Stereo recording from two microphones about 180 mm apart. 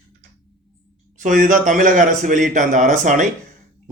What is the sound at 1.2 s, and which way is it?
A man's voice, 45° right (ahead or behind).